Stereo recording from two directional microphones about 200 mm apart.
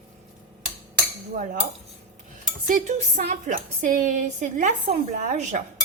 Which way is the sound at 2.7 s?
40° right (ahead or behind).